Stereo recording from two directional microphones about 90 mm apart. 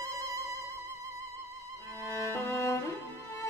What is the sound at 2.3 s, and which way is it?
Music, 25° left (ahead or behind).